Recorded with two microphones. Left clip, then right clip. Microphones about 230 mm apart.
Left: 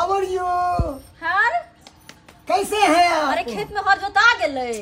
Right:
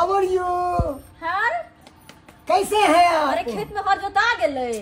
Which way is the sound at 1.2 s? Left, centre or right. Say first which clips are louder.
Left 3 dB; centre.